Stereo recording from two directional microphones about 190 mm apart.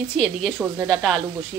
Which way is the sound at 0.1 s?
Centre (ahead or behind).